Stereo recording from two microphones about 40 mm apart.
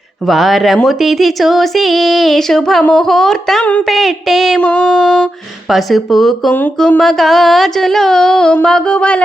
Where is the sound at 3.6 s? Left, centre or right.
Left.